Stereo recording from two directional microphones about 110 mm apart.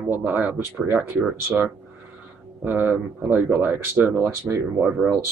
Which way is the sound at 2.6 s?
15° right (ahead or behind).